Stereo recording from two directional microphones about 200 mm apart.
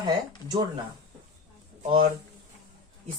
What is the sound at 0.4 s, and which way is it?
Speech, 20° right (ahead or behind).